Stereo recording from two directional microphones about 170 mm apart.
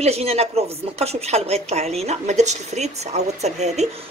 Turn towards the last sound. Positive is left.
turn(degrees=-40)  # may be behind; listen again after turning